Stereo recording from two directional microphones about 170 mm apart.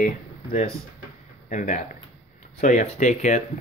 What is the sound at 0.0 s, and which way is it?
Speech, 55° left (ahead or behind).